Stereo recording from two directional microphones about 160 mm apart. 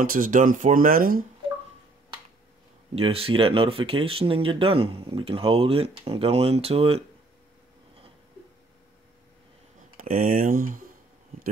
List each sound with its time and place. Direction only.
0.0 s speech: 60° right (ahead or behind)
2.9 s speech: 35° right (ahead or behind)
9.9 s speech: 60° right (ahead or behind)